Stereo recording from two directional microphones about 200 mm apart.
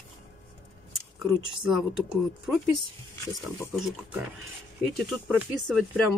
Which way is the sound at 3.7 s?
Centre (ahead or behind).